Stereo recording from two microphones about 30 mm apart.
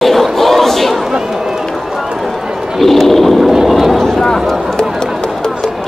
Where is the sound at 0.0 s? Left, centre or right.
Centre.